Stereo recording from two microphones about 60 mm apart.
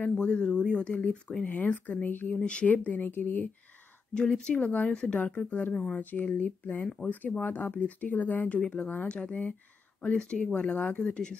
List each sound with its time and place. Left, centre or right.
0.2 s speech: centre
2.4 s speech: centre; by 3.4 s left
4.1 s speech: centre